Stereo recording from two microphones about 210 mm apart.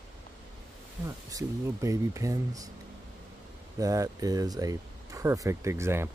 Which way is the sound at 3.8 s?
15° right (ahead or behind).